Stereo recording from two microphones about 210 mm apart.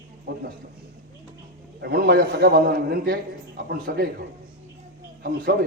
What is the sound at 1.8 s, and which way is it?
A man's voice, 50° right (ahead or behind).